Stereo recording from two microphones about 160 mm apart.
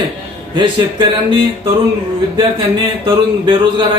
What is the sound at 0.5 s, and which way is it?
A man's voice, 30° right (ahead or behind).